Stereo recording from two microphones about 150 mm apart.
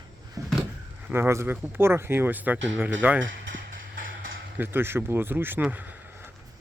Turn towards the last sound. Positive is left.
turn(degrees=-10)  # may be behind; listen again after turning